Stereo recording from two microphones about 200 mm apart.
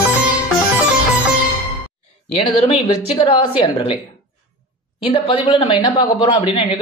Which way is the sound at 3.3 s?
25° left (ahead or behind).